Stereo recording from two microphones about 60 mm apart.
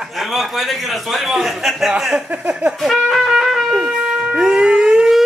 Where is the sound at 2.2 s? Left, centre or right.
Right.